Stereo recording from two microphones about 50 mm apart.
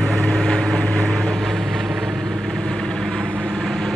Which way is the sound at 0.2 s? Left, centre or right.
Centre.